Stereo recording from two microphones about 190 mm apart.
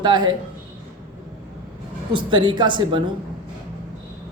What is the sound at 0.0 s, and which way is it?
Speech, 25° right (ahead or behind).